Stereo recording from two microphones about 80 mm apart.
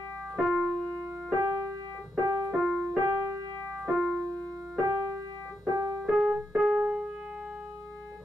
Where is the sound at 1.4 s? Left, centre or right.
Right.